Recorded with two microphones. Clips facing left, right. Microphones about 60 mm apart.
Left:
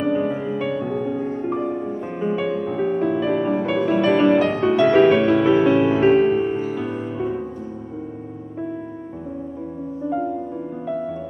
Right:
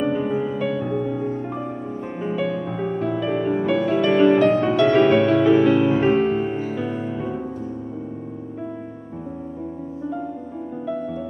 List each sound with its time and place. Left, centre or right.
0.0 s music: centre
5.6 s music: centre
5.9 s music: centre